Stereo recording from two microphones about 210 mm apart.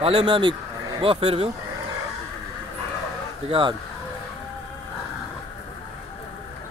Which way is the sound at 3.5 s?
25° right (ahead or behind).